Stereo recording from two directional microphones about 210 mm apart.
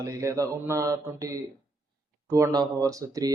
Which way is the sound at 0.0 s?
15° right (ahead or behind).